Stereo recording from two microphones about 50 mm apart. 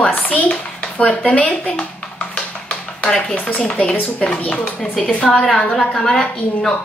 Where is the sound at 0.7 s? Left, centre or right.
Left.